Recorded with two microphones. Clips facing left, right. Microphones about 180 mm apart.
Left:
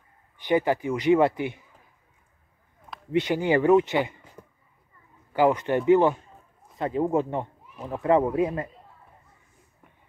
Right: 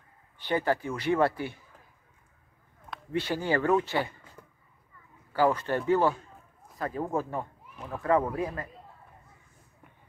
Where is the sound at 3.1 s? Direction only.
20° left (ahead or behind).